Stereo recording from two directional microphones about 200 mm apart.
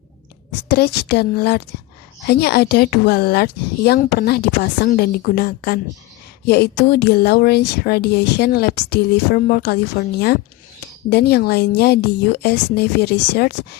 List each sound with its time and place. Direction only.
0.7 s speech: 50° left (ahead or behind)